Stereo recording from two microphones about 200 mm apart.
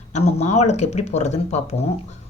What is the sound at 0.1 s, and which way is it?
Speech, 35° left (ahead or behind).